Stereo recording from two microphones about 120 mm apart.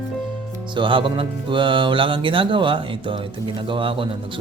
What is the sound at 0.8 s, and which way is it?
Speech, 45° right (ahead or behind).